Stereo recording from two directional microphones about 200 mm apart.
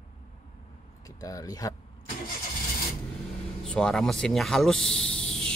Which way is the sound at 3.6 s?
5° left (ahead or behind).